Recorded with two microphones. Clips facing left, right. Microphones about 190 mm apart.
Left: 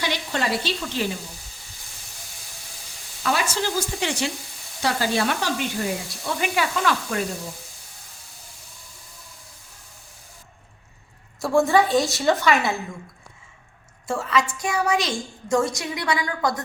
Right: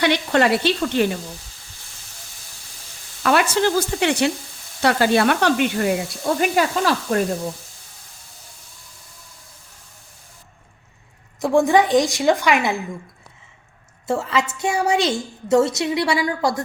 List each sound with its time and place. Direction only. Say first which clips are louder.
0.0 s speech: right 9 dB; 65° right (ahead or behind)
3.2 s speech: right 7 dB; 60° right (ahead or behind)
6.2 s speech: right 6 dB; 45° right (ahead or behind)
11.3 s a woman's voice: right 3 dB; 15° right (ahead or behind)
14.1 s a woman's voice: right 2 dB; 25° right (ahead or behind)